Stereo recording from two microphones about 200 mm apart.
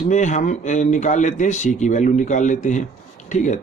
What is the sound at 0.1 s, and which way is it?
A man's voice, 35° left (ahead or behind).